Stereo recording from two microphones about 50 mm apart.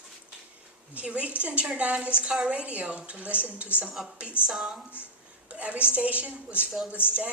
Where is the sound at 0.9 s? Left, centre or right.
Right.